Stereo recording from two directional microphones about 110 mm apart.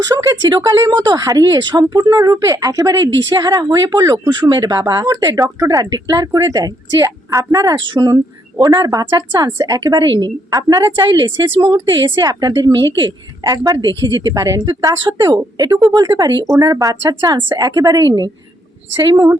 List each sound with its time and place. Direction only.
0.0 s speech: 30° right (ahead or behind)